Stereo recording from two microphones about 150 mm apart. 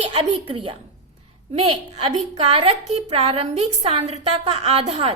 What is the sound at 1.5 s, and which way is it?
A woman's voice, 45° right (ahead or behind).